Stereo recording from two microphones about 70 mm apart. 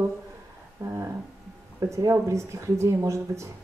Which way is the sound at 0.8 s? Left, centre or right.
Right.